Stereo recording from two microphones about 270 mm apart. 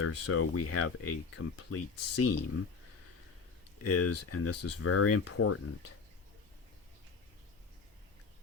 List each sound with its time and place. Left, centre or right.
0.0 s speech: left
3.8 s speech: left